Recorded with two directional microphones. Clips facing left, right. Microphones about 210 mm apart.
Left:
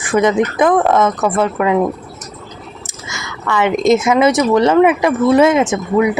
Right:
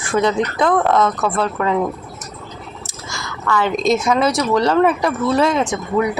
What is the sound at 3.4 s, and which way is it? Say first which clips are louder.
Speech: left 4 dB; 20° left (ahead or behind).